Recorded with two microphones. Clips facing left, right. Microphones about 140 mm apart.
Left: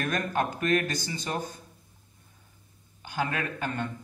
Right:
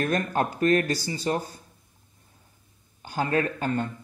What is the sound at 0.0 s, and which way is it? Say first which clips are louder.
Speech: right 3 dB; 35° right (ahead or behind).